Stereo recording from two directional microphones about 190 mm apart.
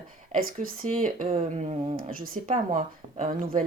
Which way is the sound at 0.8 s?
45° right (ahead or behind).